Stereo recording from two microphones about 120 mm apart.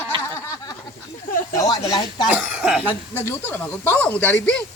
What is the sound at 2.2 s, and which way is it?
Speech, 10° right (ahead or behind).